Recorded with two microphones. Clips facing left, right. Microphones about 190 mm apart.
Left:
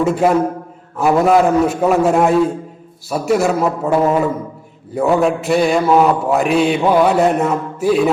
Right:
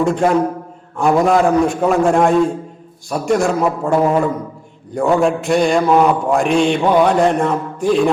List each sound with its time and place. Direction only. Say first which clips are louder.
0.0 s a man's voice: left 1 dB; 5° left (ahead or behind)